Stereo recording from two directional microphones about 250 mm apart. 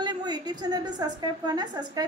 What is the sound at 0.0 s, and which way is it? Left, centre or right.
A woman's voice, centre.